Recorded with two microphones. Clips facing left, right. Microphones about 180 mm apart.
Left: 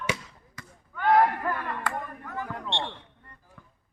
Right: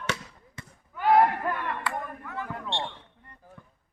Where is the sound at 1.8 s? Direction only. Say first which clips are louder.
Even; 40° left (ahead or behind).